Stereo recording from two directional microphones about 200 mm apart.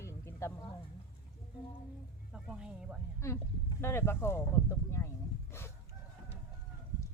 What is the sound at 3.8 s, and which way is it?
Speech, 10° left (ahead or behind).